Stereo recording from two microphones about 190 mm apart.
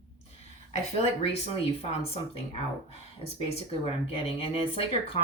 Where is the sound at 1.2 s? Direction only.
30° left (ahead or behind).